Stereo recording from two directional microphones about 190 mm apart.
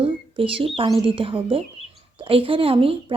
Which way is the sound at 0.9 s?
25° right (ahead or behind).